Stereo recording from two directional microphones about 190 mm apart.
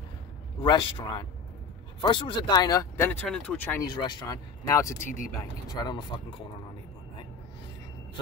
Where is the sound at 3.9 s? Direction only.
25° left (ahead or behind).